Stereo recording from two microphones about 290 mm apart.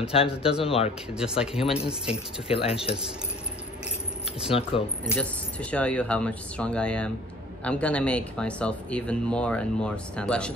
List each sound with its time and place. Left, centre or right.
0.1 s speech: centre
1.1 s speech: centre
2.4 s speech: centre
4.5 s speech: centre
5.0 s speech: centre